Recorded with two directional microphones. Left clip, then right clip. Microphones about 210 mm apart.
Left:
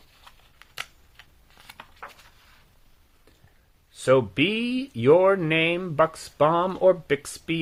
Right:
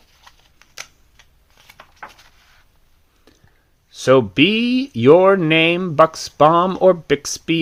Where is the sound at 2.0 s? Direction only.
5° right (ahead or behind).